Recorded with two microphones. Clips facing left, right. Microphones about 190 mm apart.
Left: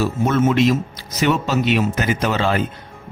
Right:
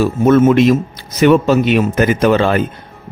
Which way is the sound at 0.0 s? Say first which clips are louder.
Right 7 dB; 55° right (ahead or behind).